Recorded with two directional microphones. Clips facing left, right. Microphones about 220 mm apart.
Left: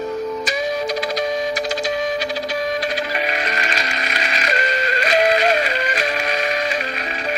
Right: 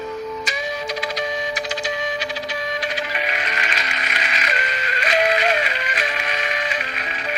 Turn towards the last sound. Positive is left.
turn(degrees=40)  # may be behind; listen again after turning